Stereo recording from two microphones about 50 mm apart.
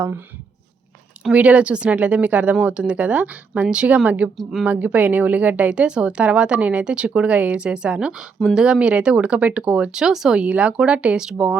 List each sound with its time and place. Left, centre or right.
1.3 s speech: right
10.4 s speech: right